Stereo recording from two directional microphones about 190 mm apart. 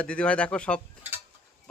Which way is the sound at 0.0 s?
5° left (ahead or behind).